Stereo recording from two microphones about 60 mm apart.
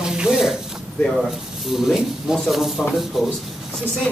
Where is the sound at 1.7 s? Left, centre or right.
Centre.